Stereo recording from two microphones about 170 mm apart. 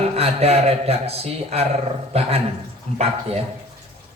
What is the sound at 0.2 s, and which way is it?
A man's voice, 35° right (ahead or behind).